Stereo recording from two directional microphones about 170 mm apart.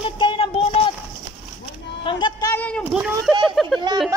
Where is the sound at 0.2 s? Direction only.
30° left (ahead or behind).